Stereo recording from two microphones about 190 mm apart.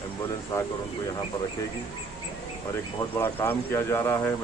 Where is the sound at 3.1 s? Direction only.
10° left (ahead or behind).